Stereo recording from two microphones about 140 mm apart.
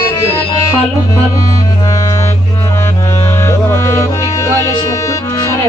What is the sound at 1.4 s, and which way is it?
Music, 25° left (ahead or behind).